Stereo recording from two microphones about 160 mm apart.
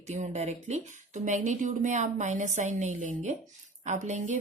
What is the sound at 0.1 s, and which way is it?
A woman's voice, 45° right (ahead or behind).